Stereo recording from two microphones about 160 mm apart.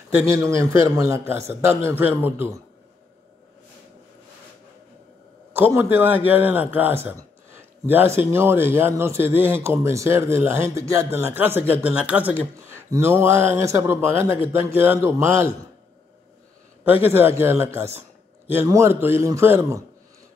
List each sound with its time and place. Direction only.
0.2 s a man's voice: 20° right (ahead or behind)
5.5 s speech: 15° right (ahead or behind)
16.8 s speech: 10° right (ahead or behind)